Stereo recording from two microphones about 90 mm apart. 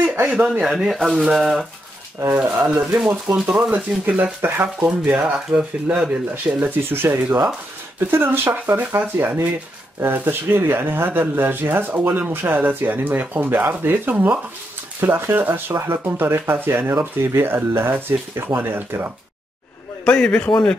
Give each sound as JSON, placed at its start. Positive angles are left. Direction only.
{"t": 0.0, "sound": "speech", "side_deg": -20}
{"t": 2.1, "sound": "speech", "side_deg": -25}
{"t": 2.6, "sound": "speech", "side_deg": -10}
{"t": 4.0, "sound": "speech", "side_deg": -20}
{"t": 6.6, "sound": "speech", "side_deg": -25}
{"t": 20.1, "sound": "a man's voice", "side_deg": 10}